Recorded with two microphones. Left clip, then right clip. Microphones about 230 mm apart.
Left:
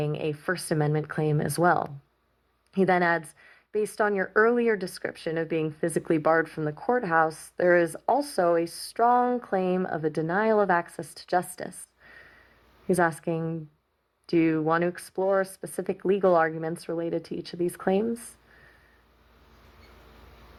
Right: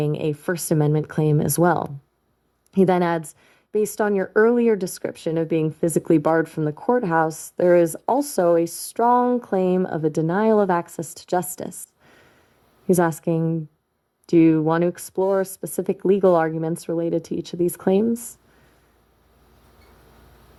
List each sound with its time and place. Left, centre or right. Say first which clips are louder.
0.0 s speech: right 5 dB; right
2.7 s speech: right 4 dB; right